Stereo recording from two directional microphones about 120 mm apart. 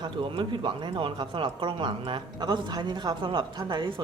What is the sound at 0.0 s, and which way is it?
A woman's voice, 45° right (ahead or behind).